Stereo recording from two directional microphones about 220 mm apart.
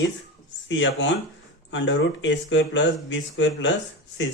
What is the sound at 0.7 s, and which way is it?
Speech, 60° left (ahead or behind).